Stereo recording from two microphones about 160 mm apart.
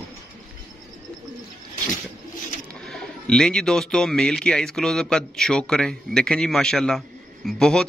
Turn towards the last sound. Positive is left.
turn(degrees=5)  # may be behind; listen again after turning